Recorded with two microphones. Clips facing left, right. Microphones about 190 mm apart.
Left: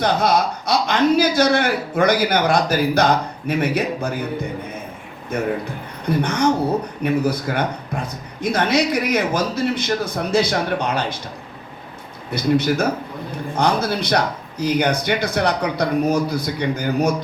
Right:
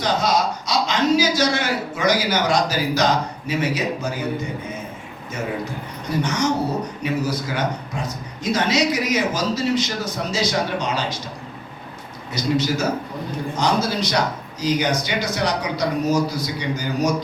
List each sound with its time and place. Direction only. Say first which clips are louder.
0.0 s speech: left 2 dB; 55° left (ahead or behind)
5.3 s speech: left 4 dB; 55° left (ahead or behind)
12.3 s speech: left 3 dB; 55° left (ahead or behind)